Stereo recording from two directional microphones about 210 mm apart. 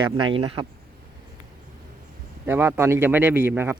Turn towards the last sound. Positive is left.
turn(degrees=-10)  # may be behind; listen again after turning